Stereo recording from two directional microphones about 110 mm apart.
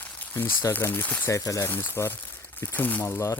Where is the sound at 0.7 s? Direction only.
20° left (ahead or behind).